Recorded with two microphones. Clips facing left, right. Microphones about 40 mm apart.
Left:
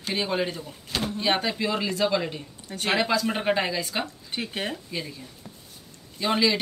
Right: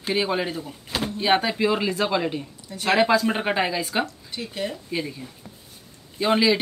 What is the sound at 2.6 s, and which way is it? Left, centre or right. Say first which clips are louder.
Speech: right 3 dB; left.